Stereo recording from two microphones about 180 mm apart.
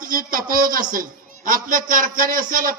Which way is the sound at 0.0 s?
50° right (ahead or behind).